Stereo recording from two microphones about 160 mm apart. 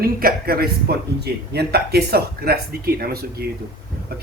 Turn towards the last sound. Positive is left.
turn(degrees=-75)  # may be behind; listen again after turning